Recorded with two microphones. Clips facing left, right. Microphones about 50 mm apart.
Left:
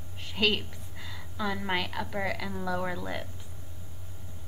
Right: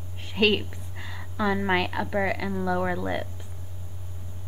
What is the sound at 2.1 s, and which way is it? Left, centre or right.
Speech, right.